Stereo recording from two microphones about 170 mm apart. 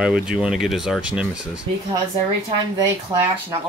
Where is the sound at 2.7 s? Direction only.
20° right (ahead or behind).